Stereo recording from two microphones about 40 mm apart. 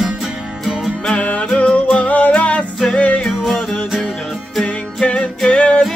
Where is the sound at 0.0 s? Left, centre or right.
Centre.